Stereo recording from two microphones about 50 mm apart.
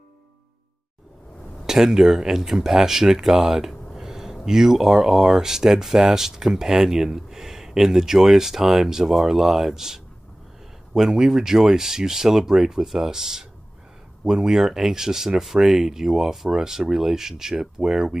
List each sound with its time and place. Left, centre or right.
1.7 s speech: centre